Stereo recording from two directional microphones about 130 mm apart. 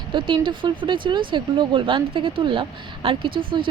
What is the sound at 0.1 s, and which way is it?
A woman's voice, 40° right (ahead or behind).